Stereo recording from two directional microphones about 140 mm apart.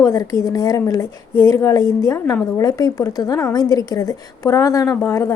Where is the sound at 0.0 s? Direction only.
25° left (ahead or behind).